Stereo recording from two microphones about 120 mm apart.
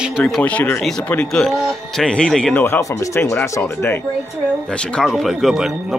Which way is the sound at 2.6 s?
25° left (ahead or behind).